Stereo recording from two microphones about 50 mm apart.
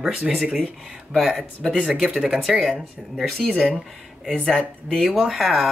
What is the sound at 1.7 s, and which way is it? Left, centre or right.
Speech, right.